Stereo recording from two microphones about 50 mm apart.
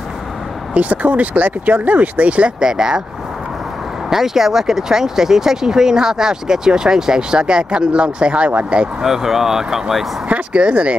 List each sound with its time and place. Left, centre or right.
0.7 s speech: right
2.7 s speech: centre
4.1 s speech: centre; by 8.8 s right
9.0 s speech: centre
10.2 s speech: right